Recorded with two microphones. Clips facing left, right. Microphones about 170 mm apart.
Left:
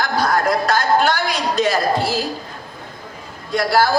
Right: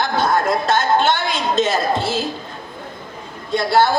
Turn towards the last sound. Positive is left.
turn(degrees=-25)  # may be behind; listen again after turning